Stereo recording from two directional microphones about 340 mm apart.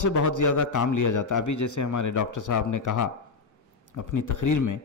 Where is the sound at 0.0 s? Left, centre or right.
Left.